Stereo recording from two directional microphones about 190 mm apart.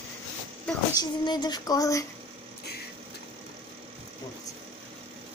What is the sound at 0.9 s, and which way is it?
Female singing, 20° left (ahead or behind).